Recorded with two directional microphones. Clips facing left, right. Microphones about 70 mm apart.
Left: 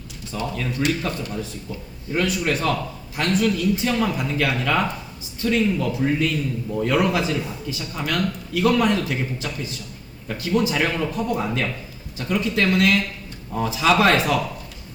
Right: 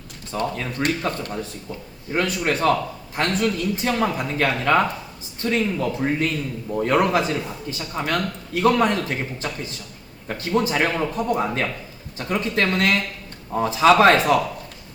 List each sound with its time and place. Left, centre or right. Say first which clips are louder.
0.3 s speech: right 1 dB; right